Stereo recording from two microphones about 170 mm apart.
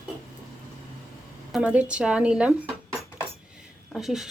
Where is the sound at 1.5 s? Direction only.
10° right (ahead or behind).